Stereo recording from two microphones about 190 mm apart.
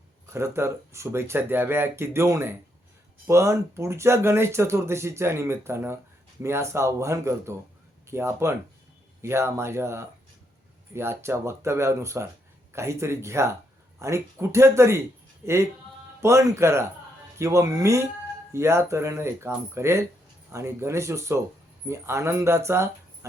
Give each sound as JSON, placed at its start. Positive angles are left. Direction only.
{"t": 0.3, "sound": "speech", "side_deg": -15}